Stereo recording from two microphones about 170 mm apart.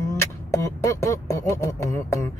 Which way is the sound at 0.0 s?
20° left (ahead or behind).